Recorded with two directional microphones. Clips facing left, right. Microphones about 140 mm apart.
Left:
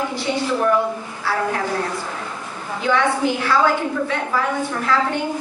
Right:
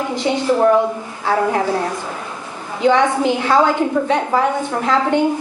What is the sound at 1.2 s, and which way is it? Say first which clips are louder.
Speech: right 5 dB; 20° right (ahead or behind).